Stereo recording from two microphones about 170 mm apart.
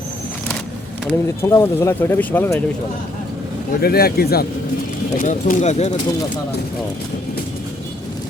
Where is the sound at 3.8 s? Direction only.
65° left (ahead or behind).